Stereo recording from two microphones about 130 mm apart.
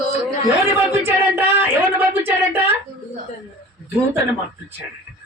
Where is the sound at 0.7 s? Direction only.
15° right (ahead or behind).